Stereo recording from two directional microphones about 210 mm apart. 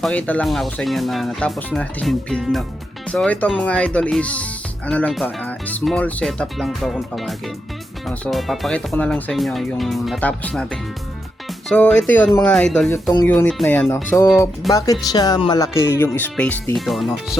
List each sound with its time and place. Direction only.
0.0 s speech: 5° left (ahead or behind)
11.7 s speech: 5° left (ahead or behind)